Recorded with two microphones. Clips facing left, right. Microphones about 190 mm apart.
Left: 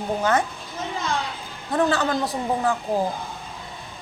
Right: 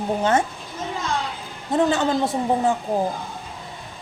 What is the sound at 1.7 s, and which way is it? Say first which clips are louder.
A woman's voice: right 2 dB; 25° right (ahead or behind).